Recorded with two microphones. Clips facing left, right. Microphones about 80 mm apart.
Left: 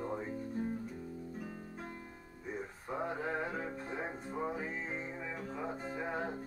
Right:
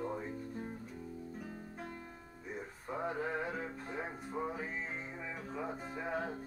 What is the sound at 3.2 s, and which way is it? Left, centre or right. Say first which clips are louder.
Music: even; centre.